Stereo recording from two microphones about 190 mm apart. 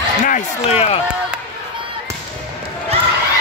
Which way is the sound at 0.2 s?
35° left (ahead or behind).